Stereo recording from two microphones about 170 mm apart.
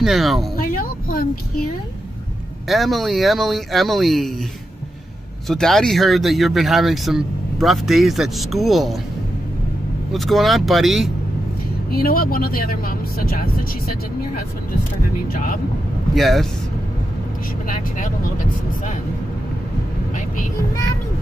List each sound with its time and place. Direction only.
0.0 s speech: centre (ahead or behind)
0.6 s a sound: 55° left (ahead or behind)
2.7 s speech: centre (ahead or behind)
5.5 s speech: 5° left (ahead or behind)
10.1 s speech: centre (ahead or behind)
11.9 s speech: 65° left (ahead or behind)
16.2 s speech: centre (ahead or behind)
17.6 s speech: 50° left (ahead or behind)